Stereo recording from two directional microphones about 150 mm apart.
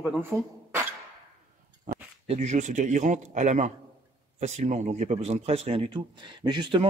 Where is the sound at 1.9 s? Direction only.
65° right (ahead or behind).